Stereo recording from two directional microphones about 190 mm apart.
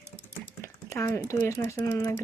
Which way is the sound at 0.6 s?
15° left (ahead or behind).